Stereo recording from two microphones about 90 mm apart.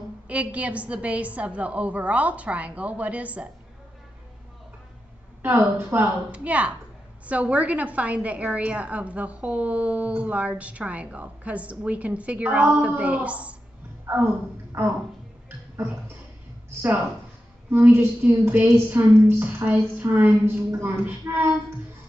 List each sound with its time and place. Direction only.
0.3 s a woman's voice: 15° right (ahead or behind)
5.4 s a woman's voice: 25° right (ahead or behind)
14.1 s a woman's voice: 25° right (ahead or behind)
17.8 s a woman's voice: 20° right (ahead or behind)